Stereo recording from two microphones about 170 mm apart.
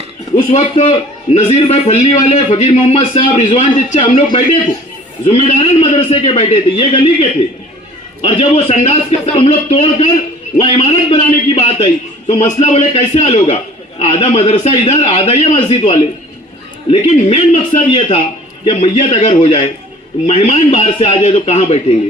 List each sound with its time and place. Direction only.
0.3 s a man's voice: 40° left (ahead or behind)